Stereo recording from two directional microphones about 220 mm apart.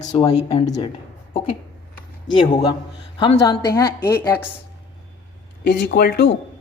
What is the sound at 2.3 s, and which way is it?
A woman's voice, 20° left (ahead or behind).